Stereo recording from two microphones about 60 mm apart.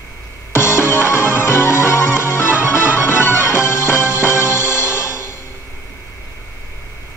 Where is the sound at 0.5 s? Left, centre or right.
Left.